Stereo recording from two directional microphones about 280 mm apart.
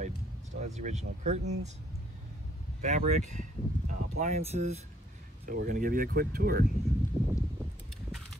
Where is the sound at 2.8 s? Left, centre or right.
Right.